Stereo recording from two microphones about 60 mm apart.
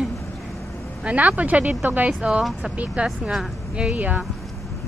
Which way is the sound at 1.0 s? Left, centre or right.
Right.